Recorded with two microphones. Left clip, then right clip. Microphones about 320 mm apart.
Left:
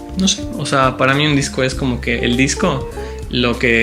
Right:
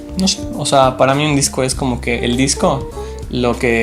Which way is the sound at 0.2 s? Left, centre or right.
Centre.